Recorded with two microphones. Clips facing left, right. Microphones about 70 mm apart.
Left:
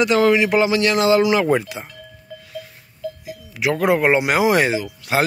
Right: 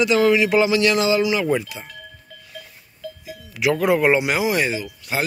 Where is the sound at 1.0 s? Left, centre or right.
Left.